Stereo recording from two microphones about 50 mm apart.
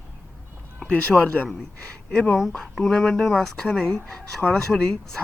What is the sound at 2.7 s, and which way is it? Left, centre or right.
Speech, centre.